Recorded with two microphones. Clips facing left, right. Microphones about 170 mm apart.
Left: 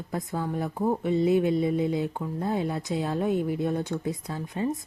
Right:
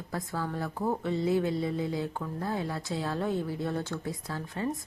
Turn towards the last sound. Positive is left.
turn(degrees=20)  # may be behind; listen again after turning